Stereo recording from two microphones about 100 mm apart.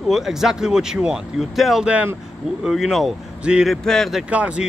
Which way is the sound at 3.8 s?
5° left (ahead or behind).